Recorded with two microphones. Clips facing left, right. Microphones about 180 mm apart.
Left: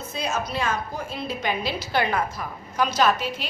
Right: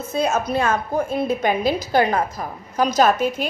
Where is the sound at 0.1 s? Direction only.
50° right (ahead or behind).